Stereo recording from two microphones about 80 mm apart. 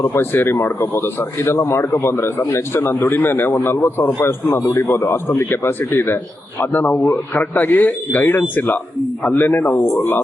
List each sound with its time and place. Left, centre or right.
0.0 s a man's voice: left